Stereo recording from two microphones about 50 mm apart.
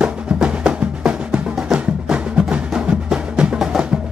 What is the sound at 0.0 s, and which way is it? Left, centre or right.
Music, right.